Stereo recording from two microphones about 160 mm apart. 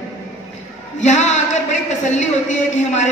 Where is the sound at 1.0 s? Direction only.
45° left (ahead or behind).